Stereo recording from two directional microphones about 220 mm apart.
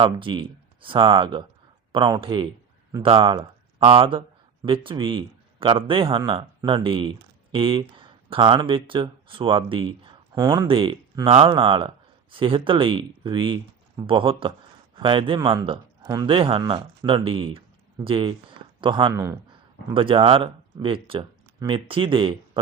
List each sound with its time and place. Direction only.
0.0 s a man's voice: 20° right (ahead or behind)